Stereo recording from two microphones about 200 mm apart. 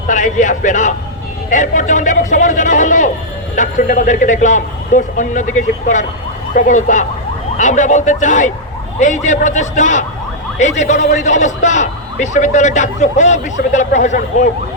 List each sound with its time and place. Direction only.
0.1 s a man's voice: 40° left (ahead or behind)